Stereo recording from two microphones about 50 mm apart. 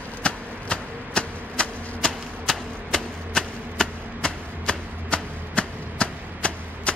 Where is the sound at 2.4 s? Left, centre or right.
Centre.